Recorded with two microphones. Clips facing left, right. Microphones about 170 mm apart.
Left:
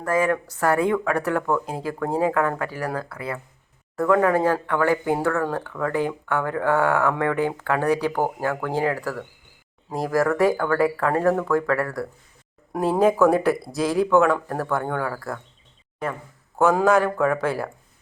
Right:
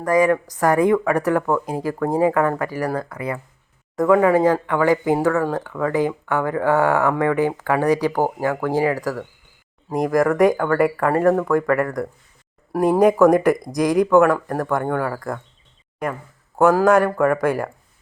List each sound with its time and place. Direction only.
0.0 s speech: 15° right (ahead or behind)
16.6 s speech: 10° right (ahead or behind)